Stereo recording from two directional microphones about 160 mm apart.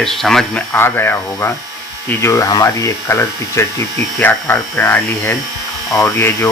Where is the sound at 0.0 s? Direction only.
Centre (ahead or behind).